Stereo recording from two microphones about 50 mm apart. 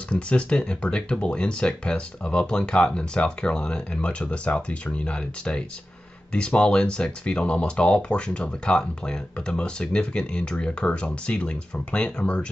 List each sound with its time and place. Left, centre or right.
0.1 s speech: left